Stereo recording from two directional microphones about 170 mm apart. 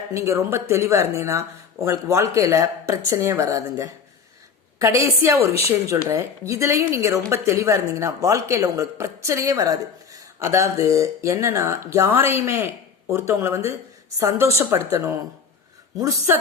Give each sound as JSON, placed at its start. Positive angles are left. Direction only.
{"t": 0.1, "sound": "a woman's voice", "side_deg": -15}